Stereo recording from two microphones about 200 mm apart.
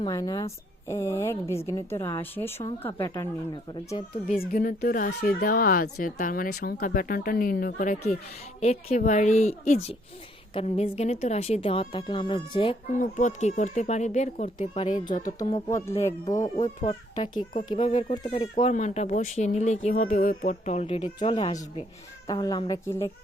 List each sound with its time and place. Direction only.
0.0 s a woman's voice: 20° left (ahead or behind)
3.9 s a woman's voice: 30° left (ahead or behind)
4.5 s a woman's voice: 45° left (ahead or behind); by 12.7 s 25° left (ahead or behind)
12.9 s speech: 40° left (ahead or behind)
15.7 s a woman's voice: 15° left (ahead or behind)
16.8 s a woman's voice: 25° left (ahead or behind)
18.1 s a woman's voice: 25° left (ahead or behind)